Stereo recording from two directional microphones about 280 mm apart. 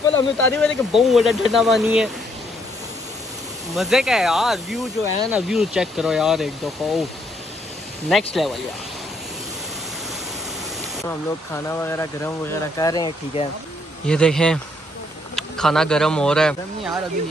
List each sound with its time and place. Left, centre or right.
0.0 s speech: centre
3.7 s speech: centre
8.1 s speech: centre
11.1 s speech: centre
14.0 s speech: centre